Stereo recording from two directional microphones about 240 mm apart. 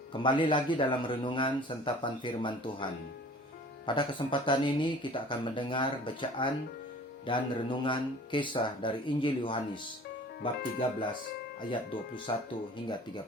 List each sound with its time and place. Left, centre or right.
0.1 s speech: centre
3.8 s speech: left
11.7 s speech: left